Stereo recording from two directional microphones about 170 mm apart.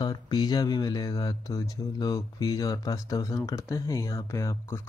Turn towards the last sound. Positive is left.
turn(degrees=15)  # may be behind; listen again after turning